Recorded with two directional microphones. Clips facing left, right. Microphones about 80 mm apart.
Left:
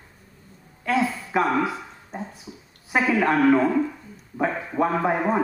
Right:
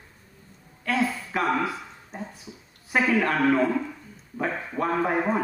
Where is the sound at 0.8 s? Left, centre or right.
Centre.